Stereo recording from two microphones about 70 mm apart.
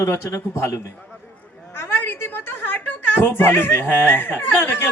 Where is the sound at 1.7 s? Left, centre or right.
Left.